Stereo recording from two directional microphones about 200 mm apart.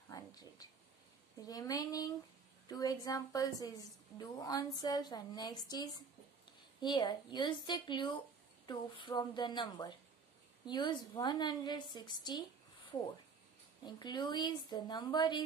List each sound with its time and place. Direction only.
0.1 s a sound: 20° left (ahead or behind)
1.4 s a woman's voice: 20° left (ahead or behind)
13.8 s a woman's voice: 20° left (ahead or behind)